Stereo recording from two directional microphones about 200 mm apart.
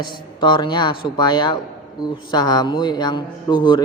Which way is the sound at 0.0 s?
20° left (ahead or behind).